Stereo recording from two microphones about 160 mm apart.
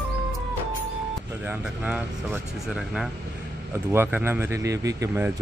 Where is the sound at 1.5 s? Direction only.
10° right (ahead or behind).